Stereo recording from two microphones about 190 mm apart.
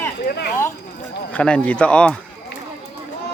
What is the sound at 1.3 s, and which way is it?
Speech, 5° left (ahead or behind).